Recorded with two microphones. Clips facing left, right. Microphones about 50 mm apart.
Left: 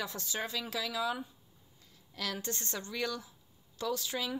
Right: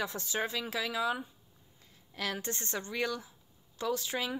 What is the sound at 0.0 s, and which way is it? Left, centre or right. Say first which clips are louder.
A woman's voice: right 3 dB; centre.